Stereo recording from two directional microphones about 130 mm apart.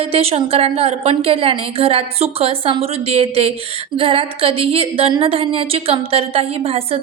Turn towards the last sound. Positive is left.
turn(degrees=-50)  # may be behind; listen again after turning